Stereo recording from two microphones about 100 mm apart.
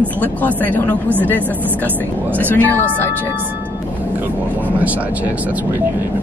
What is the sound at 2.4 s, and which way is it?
Speech, 20° left (ahead or behind).